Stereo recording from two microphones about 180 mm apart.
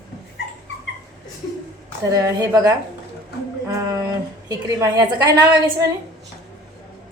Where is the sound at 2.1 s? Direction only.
20° right (ahead or behind).